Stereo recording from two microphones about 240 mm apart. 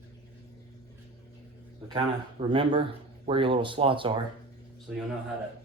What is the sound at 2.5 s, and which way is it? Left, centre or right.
Speech, right.